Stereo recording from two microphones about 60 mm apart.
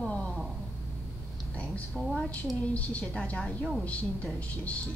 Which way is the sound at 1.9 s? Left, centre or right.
Centre.